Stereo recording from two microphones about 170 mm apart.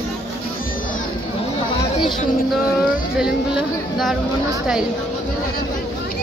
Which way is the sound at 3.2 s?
Centre (ahead or behind).